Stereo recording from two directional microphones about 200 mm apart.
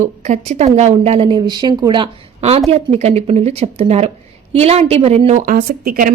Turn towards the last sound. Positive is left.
turn(degrees=-45)  # may be behind; listen again after turning